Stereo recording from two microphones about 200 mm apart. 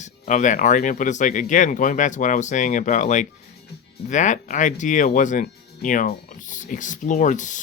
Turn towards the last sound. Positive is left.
turn(degrees=40)  # may be behind; listen again after turning